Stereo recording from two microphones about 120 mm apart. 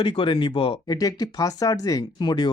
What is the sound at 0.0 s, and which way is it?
Speech, 45° left (ahead or behind).